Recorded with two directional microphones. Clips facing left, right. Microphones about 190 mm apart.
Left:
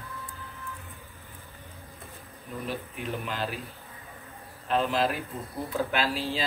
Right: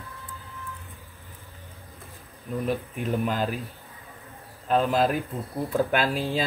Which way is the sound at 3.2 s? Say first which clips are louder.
Right 6 dB; 45° right (ahead or behind).